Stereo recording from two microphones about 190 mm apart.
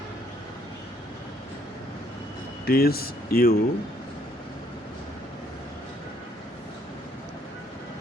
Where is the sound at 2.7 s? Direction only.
55° left (ahead or behind).